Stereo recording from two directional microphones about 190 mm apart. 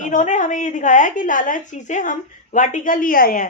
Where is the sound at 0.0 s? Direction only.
40° left (ahead or behind).